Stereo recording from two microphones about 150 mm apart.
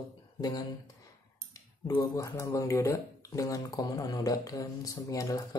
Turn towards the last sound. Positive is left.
turn(degrees=20)  # may be behind; listen again after turning